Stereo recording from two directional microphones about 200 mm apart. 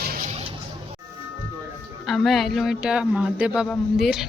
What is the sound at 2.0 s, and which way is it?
Speech, centre (ahead or behind).